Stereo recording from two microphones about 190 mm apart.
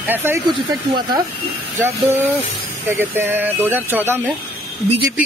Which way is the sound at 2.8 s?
10° right (ahead or behind).